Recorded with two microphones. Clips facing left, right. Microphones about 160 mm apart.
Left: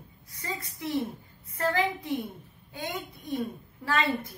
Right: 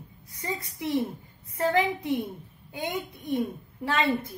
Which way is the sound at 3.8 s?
20° right (ahead or behind).